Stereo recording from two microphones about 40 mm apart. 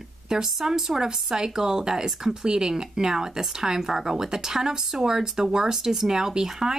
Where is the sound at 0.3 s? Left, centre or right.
Centre.